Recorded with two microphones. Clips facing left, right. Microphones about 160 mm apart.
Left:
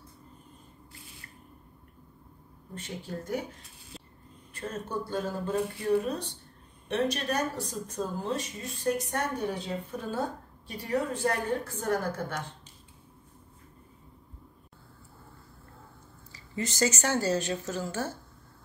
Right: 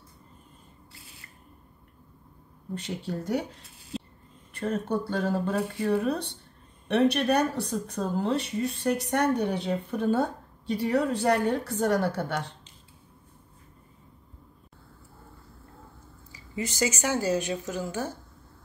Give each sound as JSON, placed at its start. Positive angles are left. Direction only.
{"t": 2.7, "sound": "speech", "side_deg": -70}
{"t": 4.6, "sound": "speech", "side_deg": -65}
{"t": 16.3, "sound": "a woman's voice", "side_deg": -10}